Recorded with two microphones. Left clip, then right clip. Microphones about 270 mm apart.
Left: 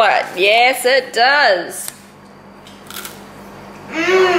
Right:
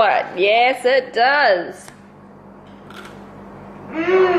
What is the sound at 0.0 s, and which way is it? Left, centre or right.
A woman's voice, centre.